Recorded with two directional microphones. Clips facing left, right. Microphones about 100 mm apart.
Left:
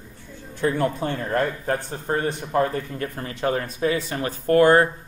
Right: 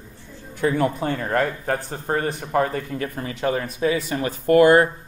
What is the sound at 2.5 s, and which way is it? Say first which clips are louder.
Speech: right 1 dB; 70° right (ahead or behind).